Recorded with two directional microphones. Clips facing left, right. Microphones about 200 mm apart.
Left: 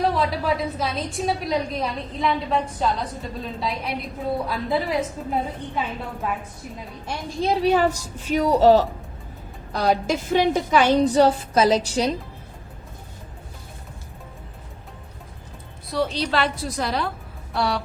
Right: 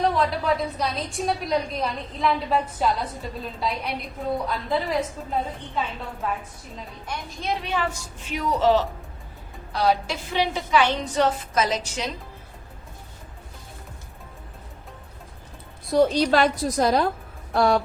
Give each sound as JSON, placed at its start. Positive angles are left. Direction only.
{"t": 0.0, "sound": "a woman's voice", "side_deg": 0}
{"t": 7.4, "sound": "a woman's voice", "side_deg": 35}
{"t": 15.9, "sound": "a woman's voice", "side_deg": -45}